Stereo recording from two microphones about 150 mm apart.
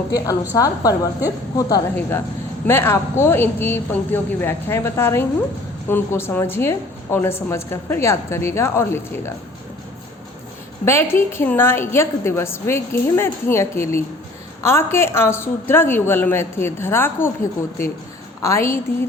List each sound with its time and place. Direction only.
0.5 s a woman's voice: 25° left (ahead or behind)
10.8 s a woman's voice: 15° left (ahead or behind)
18.4 s a woman's voice: 20° left (ahead or behind)